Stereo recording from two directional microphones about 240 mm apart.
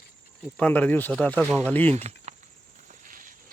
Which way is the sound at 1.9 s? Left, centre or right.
Right.